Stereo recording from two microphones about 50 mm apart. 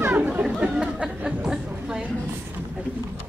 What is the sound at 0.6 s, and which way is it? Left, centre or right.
Chatter, right.